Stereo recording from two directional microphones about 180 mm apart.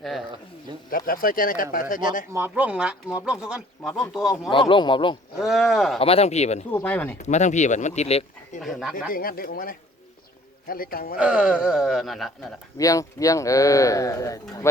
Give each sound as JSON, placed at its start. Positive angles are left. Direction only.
{"t": 0.0, "sound": "speech", "side_deg": 0}
{"t": 0.9, "sound": "speech", "side_deg": 55}
{"t": 2.3, "sound": "speech", "side_deg": -10}
{"t": 4.7, "sound": "speech", "side_deg": 25}
{"t": 5.4, "sound": "speech", "side_deg": 0}
{"t": 6.0, "sound": "speech", "side_deg": 35}
{"t": 6.7, "sound": "speech", "side_deg": 10}
{"t": 7.2, "sound": "speech", "side_deg": 40}
{"t": 8.6, "sound": "speech", "side_deg": 0}
{"t": 9.1, "sound": "speech", "side_deg": 55}
{"t": 11.2, "sound": "speech", "side_deg": -5}
{"t": 12.7, "sound": "speech", "side_deg": 20}